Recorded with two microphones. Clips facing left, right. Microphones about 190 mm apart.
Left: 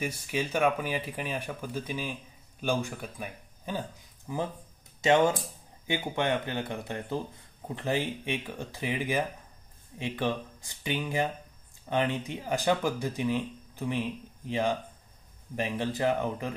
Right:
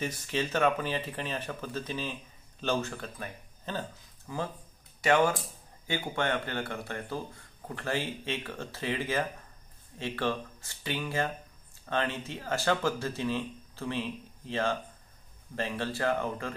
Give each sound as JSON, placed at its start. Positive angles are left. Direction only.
{"t": 0.0, "sound": "speech", "side_deg": 10}